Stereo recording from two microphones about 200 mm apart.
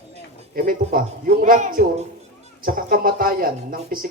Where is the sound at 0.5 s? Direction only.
45° right (ahead or behind).